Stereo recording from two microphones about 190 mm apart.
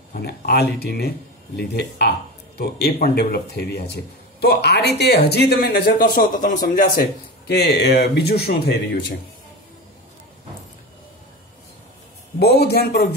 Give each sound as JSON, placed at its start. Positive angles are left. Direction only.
{"t": 0.1, "sound": "speech", "side_deg": 50}
{"t": 12.4, "sound": "speech", "side_deg": 60}